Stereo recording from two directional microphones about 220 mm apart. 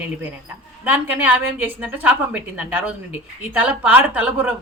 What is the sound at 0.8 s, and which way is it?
A woman's voice, 5° right (ahead or behind).